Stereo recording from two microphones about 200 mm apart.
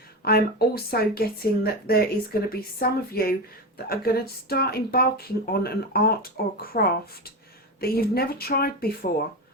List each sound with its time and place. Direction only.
0.3 s a woman's voice: 50° left (ahead or behind)